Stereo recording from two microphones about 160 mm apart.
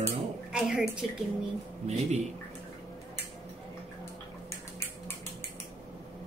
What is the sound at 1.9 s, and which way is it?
Speech, 45° right (ahead or behind).